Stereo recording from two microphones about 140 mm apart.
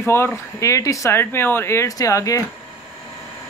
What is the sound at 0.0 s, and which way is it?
Speech, 15° left (ahead or behind).